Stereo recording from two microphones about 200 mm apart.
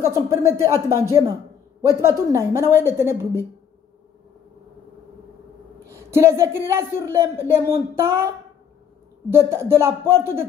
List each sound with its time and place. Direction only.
0.1 s speech: 15° right (ahead or behind)
5.9 s a woman's voice: 15° right (ahead or behind)
9.3 s speech: 15° right (ahead or behind)